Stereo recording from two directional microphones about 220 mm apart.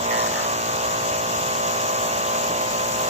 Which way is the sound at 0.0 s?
30° right (ahead or behind).